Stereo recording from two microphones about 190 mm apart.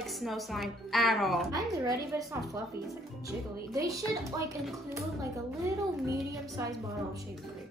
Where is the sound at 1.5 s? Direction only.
20° right (ahead or behind).